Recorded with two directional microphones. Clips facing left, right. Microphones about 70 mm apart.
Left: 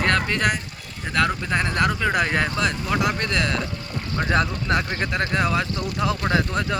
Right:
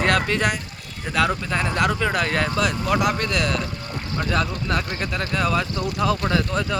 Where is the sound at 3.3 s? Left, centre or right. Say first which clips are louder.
Even; left.